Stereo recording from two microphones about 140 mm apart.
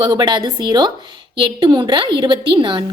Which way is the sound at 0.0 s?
30° right (ahead or behind).